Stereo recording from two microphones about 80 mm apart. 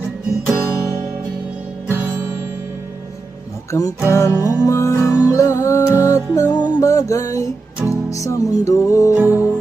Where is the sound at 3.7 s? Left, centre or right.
Left.